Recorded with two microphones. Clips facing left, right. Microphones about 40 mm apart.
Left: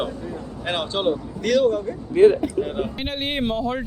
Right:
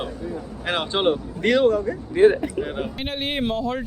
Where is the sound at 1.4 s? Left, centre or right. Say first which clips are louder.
Even; right.